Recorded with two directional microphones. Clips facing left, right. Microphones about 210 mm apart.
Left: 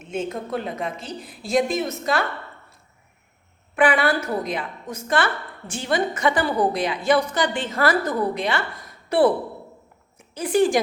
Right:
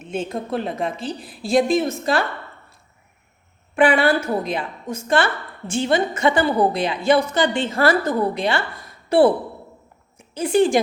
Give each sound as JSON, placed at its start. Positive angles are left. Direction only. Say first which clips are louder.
{"t": 0.1, "sound": "a woman's voice", "louder": "right 2 dB", "side_deg": -30}
{"t": 3.8, "sound": "a woman's voice", "louder": "right 3 dB", "side_deg": -25}